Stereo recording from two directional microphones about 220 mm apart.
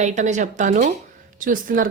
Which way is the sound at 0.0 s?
35° right (ahead or behind).